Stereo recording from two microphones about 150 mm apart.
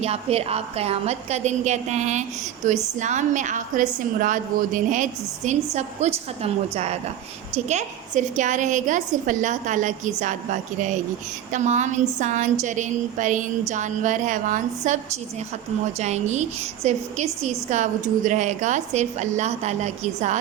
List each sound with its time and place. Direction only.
0.0 s a woman's voice: 45° right (ahead or behind)